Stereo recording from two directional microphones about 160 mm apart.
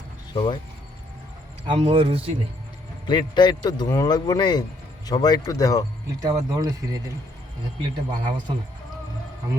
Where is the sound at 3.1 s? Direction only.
30° left (ahead or behind).